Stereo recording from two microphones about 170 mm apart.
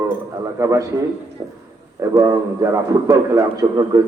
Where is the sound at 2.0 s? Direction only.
20° right (ahead or behind).